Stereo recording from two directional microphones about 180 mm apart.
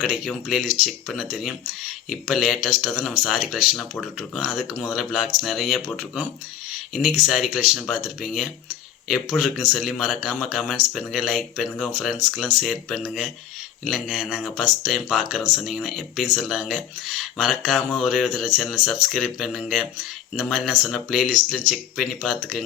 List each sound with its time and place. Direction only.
0.0 s speech: centre (ahead or behind)